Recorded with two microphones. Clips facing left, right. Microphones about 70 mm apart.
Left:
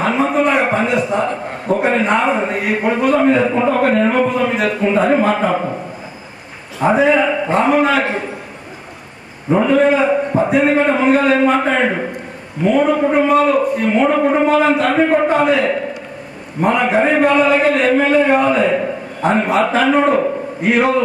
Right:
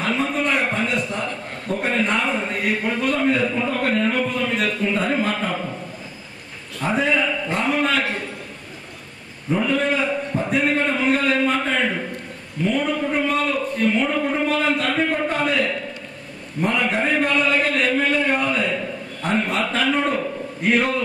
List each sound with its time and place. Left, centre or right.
0.0 s a sound: centre
2.0 s a man's voice: centre
2.3 s a man's voice: centre
6.8 s a man's voice: centre
9.5 s a man's voice: left
9.8 s a man's voice: centre
13.3 s a man's voice: centre